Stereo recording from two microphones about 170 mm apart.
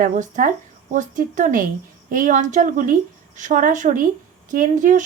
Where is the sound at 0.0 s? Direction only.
50° right (ahead or behind).